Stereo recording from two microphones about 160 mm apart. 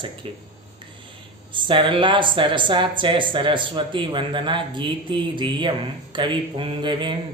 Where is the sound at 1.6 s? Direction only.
30° right (ahead or behind).